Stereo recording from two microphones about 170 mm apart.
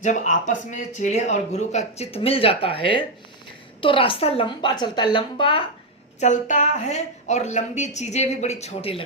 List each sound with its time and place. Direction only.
0.0 s a man's voice: 45° left (ahead or behind); by 5.6 s 30° left (ahead or behind)
6.1 s a man's voice: 45° left (ahead or behind)